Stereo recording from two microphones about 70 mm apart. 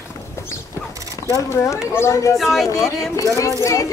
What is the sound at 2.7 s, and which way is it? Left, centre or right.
Speech, left.